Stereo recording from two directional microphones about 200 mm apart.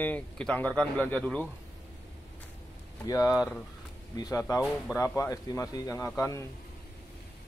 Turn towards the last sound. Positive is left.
turn(degrees=15)  # may be behind; listen again after turning